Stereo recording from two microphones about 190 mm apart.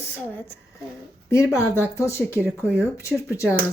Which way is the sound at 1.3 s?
15° left (ahead or behind).